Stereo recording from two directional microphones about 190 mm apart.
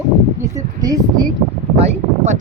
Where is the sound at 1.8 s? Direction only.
35° right (ahead or behind).